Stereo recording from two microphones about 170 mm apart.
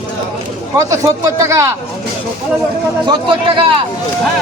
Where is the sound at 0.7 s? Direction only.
20° right (ahead or behind).